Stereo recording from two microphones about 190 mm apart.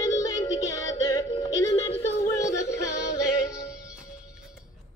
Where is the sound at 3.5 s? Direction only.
5° right (ahead or behind).